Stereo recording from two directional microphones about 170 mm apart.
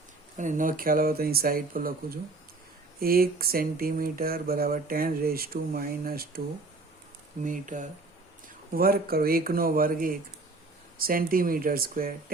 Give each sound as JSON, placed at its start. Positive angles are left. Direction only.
{"t": 0.3, "sound": "speech", "side_deg": -50}
{"t": 7.4, "sound": "speech", "side_deg": -50}
{"t": 8.7, "sound": "speech", "side_deg": -60}